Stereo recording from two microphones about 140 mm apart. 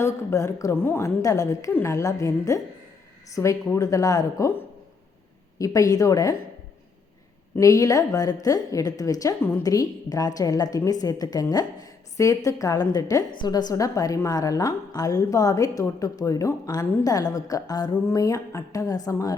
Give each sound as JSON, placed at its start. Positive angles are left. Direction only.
{"t": 0.0, "sound": "a woman's voice", "side_deg": 20}
{"t": 7.5, "sound": "a woman's voice", "side_deg": 25}
{"t": 9.6, "sound": "a woman's voice", "side_deg": 25}